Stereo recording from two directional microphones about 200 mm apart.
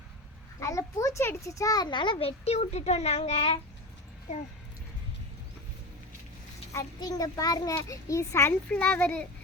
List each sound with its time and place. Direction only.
0.6 s a child's voice: 15° left (ahead or behind); by 3.6 s 30° left (ahead or behind)
6.7 s a child's voice: 15° left (ahead or behind)